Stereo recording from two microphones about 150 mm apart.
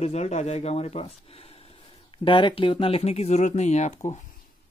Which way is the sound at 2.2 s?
35° left (ahead or behind).